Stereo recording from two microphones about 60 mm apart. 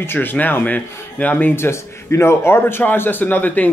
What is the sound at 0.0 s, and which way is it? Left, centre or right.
Speech, left.